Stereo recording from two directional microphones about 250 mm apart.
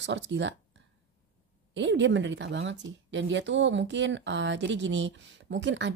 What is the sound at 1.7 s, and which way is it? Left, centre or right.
A woman's voice, right.